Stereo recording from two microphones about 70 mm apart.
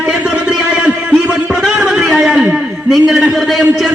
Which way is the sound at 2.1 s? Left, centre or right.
Centre.